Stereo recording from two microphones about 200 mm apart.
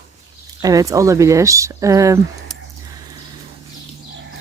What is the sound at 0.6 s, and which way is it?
Speech, 15° right (ahead or behind).